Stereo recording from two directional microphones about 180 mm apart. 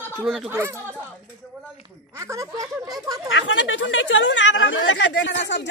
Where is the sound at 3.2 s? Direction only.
90° left.